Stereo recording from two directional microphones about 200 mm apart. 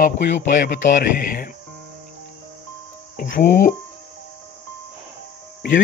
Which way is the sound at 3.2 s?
45° left (ahead or behind).